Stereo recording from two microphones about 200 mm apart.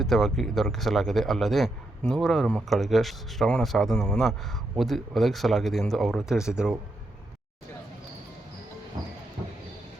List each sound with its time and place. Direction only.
0.0 s speech: centre (ahead or behind)